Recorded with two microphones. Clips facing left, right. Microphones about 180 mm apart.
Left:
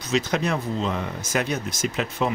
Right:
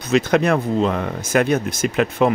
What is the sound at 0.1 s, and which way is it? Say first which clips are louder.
Speech: right 7 dB; 60° right (ahead or behind).